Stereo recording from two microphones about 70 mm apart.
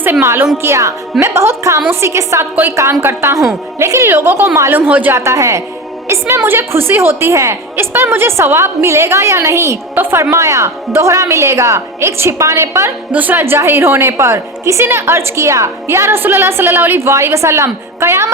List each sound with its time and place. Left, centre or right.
0.0 s a woman's voice: right
0.6 s a woman's voice: right
4.1 s a woman's voice: right
5.1 s a woman's voice: right
9.9 s a woman's voice: right
10.3 s a woman's voice: right
13.1 s speech: right
13.4 s a woman's voice: right